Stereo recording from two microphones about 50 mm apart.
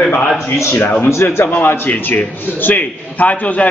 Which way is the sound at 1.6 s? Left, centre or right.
Left.